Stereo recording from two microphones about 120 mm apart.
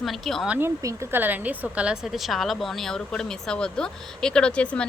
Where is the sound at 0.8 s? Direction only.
25° right (ahead or behind); by 4.9 s 10° left (ahead or behind).